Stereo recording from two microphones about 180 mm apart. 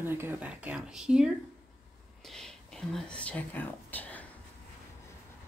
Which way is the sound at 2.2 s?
Centre (ahead or behind).